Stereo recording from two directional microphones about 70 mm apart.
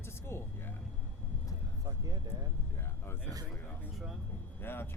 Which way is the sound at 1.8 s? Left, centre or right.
Right.